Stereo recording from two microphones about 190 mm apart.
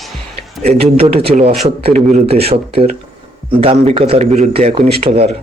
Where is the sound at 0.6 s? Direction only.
35° right (ahead or behind).